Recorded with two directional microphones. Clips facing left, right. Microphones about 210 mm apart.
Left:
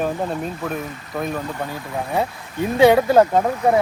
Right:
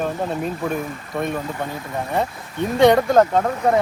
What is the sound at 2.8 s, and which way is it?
Speech, 5° left (ahead or behind).